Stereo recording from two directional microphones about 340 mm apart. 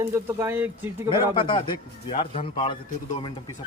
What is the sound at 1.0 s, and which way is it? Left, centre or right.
Speech, centre.